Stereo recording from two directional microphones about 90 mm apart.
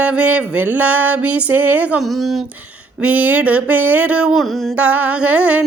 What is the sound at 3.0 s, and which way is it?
Music, 15° right (ahead or behind).